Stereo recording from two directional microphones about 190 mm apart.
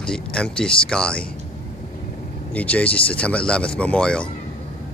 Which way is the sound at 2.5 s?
5° left (ahead or behind).